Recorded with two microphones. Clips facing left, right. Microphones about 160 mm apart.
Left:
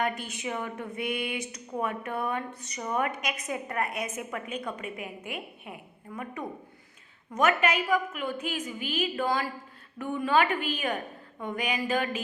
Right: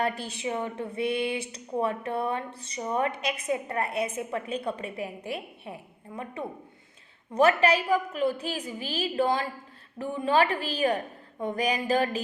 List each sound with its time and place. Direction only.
0.0 s speech: 30° right (ahead or behind)